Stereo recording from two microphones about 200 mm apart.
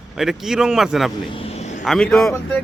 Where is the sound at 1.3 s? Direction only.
30° left (ahead or behind).